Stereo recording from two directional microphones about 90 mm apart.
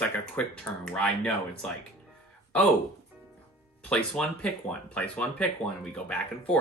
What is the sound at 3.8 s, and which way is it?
Speech, 10° left (ahead or behind).